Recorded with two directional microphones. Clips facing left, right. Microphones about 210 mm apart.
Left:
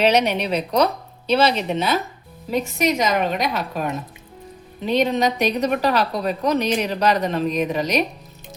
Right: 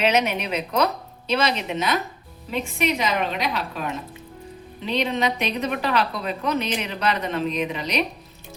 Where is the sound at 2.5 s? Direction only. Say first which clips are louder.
Left 4 dB; 40° left (ahead or behind).